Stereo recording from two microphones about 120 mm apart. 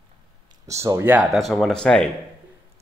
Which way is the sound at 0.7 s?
25° right (ahead or behind).